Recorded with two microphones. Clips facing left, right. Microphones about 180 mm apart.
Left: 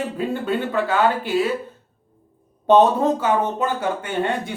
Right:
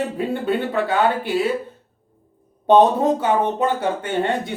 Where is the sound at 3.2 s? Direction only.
25° right (ahead or behind).